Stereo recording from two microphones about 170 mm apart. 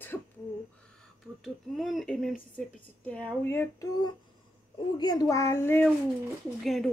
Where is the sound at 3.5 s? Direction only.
15° left (ahead or behind).